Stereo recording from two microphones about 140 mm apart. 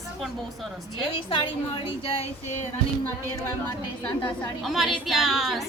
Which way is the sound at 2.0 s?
45° left (ahead or behind).